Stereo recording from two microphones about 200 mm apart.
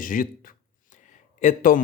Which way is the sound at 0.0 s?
45° left (ahead or behind).